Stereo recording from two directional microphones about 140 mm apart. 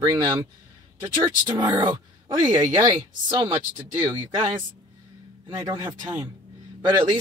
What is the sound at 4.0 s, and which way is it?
Speech, 35° right (ahead or behind).